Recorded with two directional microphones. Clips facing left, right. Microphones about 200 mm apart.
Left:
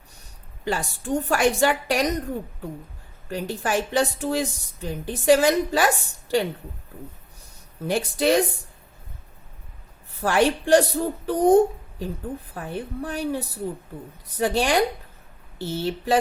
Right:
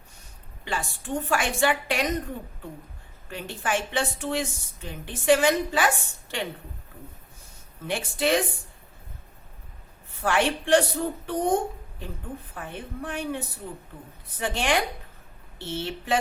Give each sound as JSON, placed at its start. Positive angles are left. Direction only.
{"t": 0.6, "sound": "a woman's voice", "side_deg": 40}
{"t": 3.2, "sound": "a woman's voice", "side_deg": 40}
{"t": 7.9, "sound": "a woman's voice", "side_deg": 40}
{"t": 10.2, "sound": "a woman's voice", "side_deg": 40}